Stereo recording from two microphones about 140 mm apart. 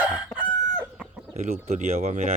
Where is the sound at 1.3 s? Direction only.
55° right (ahead or behind).